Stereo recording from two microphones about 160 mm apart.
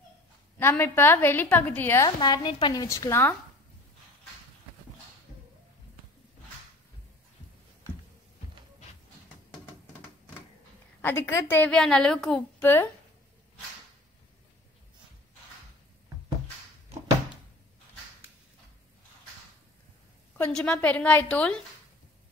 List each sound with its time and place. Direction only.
0.6 s a woman's voice: 15° left (ahead or behind)
2.0 s a woman's voice: 30° left (ahead or behind)
11.0 s a woman's voice: 15° left (ahead or behind)
20.3 s a woman's voice: 5° left (ahead or behind)